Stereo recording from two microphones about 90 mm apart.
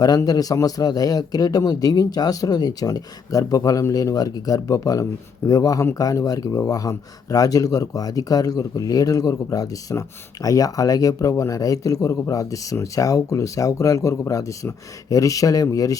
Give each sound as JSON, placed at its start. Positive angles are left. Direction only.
{"t": 0.3, "sound": "a man's voice", "side_deg": 45}